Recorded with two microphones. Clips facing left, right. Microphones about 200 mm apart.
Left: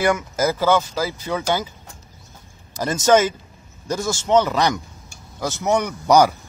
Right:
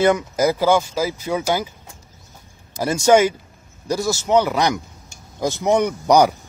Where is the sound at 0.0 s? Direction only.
20° right (ahead or behind).